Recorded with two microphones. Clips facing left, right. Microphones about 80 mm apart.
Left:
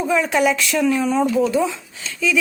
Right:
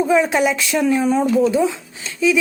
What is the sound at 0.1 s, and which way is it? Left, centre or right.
Speech, right.